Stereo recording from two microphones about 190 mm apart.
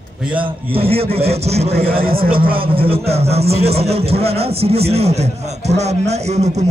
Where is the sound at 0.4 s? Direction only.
30° right (ahead or behind).